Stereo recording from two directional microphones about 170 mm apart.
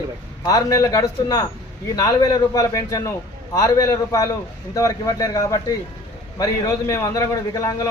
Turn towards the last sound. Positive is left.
turn(degrees=20)  # may be behind; listen again after turning